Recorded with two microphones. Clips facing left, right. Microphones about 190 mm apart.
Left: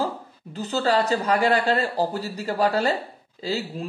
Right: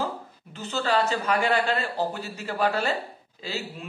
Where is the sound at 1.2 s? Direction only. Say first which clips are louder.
Left 3 dB; 35° left (ahead or behind).